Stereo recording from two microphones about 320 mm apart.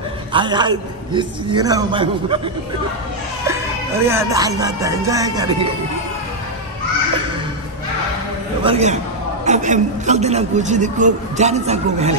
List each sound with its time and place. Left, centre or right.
0.3 s a man's voice: centre
8.6 s a woman's voice: centre